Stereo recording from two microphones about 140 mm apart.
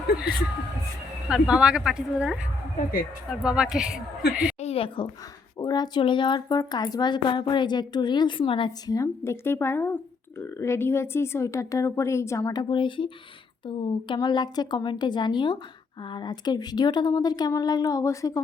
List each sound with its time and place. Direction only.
1.3 s a woman's voice: 5° right (ahead or behind)
4.6 s a sound: 40° left (ahead or behind)
5.5 s a woman's voice: 30° left (ahead or behind)
8.9 s a woman's voice: 20° left (ahead or behind)
12.7 s a woman's voice: 35° left (ahead or behind)